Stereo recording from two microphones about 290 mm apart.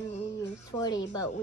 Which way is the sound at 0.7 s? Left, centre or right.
Centre.